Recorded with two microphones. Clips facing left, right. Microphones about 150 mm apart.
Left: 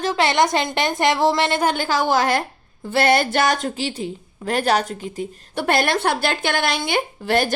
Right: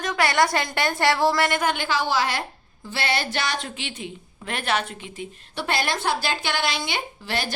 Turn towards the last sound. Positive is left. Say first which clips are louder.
# left 9 dB
turn(degrees=50)  # may be behind; listen again after turning